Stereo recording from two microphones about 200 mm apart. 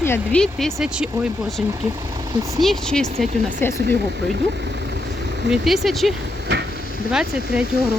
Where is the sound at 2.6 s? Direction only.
Centre (ahead or behind).